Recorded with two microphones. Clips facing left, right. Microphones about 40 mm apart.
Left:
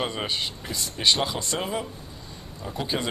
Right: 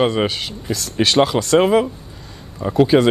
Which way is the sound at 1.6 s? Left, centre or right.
Right.